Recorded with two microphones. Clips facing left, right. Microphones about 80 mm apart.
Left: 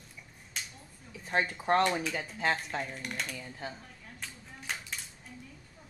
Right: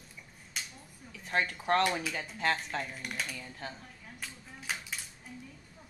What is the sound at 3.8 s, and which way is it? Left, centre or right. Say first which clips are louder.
Dishes: even; centre.